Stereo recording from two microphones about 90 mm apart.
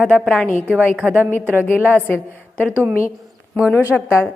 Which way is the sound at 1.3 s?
15° left (ahead or behind).